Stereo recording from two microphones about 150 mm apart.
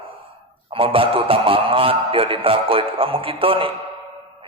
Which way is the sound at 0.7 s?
35° right (ahead or behind).